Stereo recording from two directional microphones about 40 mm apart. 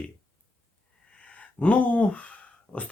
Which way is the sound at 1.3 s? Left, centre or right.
Left.